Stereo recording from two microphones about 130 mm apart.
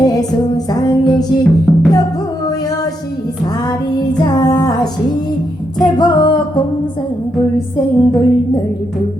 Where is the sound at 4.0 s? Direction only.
30° left (ahead or behind).